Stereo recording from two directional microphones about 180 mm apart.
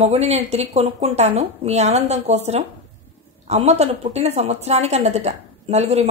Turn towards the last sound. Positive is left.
turn(degrees=-35)  # may be behind; listen again after turning